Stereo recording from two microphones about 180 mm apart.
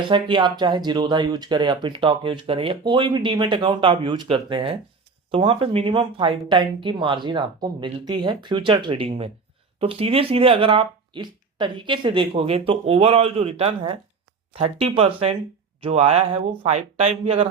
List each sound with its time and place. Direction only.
0.1 s speech: 25° right (ahead or behind)